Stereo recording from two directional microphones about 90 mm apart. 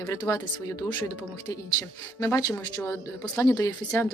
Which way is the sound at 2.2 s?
30° left (ahead or behind).